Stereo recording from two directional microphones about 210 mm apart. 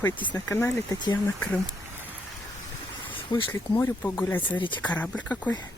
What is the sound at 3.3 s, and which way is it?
Speech, 15° left (ahead or behind).